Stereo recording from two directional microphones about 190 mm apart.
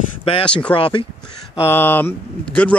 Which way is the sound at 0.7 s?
30° left (ahead or behind).